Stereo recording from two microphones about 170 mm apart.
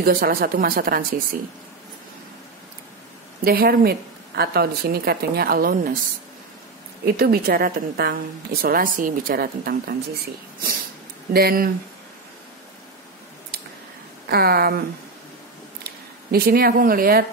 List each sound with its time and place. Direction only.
0.0 s speech: 60° right (ahead or behind)
3.4 s speech: 60° right (ahead or behind)
7.1 s speech: 65° right (ahead or behind)
14.3 s speech: 65° right (ahead or behind)
15.8 s speech: 65° right (ahead or behind)